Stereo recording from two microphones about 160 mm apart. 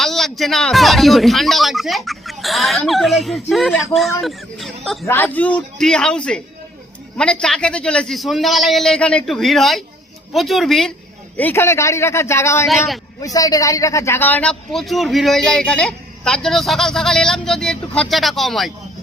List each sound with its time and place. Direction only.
0.0 s a man's voice: centre (ahead or behind)
5.0 s a man's voice: 15° left (ahead or behind)
11.3 s a man's voice: 15° left (ahead or behind)
12.6 s a man's voice: centre (ahead or behind)
13.2 s a man's voice: 25° left (ahead or behind); by 18.7 s centre (ahead or behind)